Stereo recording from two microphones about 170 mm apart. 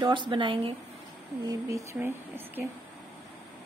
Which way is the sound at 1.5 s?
20° right (ahead or behind).